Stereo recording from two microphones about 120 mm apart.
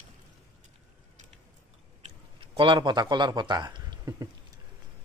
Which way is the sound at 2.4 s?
45° right (ahead or behind).